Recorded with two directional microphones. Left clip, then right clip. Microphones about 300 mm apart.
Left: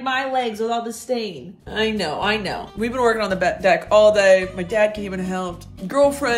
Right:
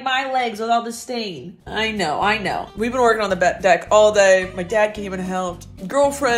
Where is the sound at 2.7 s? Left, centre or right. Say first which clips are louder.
Right 2 dB; centre.